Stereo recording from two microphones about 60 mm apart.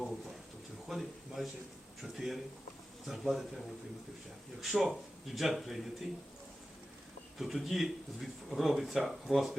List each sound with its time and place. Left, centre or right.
0.0 s a sound: centre
2.0 s speech: centre
4.6 s speech: centre
7.3 s speech: centre